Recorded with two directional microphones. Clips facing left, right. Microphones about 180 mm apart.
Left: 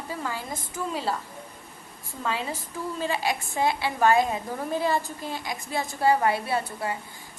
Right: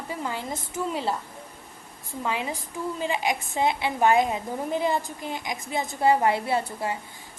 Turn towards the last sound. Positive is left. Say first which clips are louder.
# right 2 dB
turn(degrees=-25)  # may be behind; listen again after turning